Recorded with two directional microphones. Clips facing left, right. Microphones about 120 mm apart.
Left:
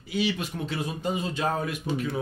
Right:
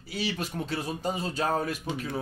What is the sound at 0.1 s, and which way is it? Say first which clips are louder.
Speech: left 4 dB; 40° right (ahead or behind).